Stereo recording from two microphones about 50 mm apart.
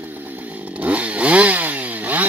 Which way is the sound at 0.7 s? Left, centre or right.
Right.